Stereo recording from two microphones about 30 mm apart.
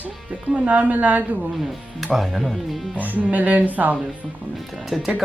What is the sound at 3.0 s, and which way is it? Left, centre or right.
Speech, right.